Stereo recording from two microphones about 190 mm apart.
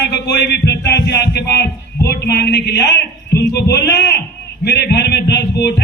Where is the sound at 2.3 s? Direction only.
60° left (ahead or behind).